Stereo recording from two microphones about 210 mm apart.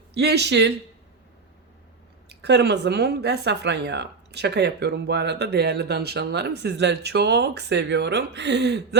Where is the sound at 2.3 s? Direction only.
55° right (ahead or behind).